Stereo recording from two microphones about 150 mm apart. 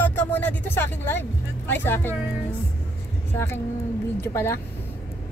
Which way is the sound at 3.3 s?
15° left (ahead or behind).